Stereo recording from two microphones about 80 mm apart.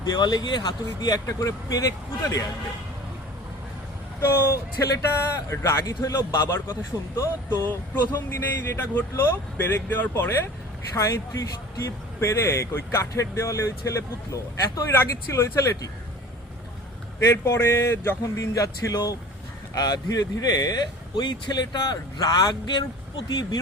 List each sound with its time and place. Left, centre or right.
0.0 s speech: left
4.2 s speech: left
8.0 s speech: left
10.9 s speech: left
17.2 s speech: left
18.2 s speech: left
21.2 s speech: left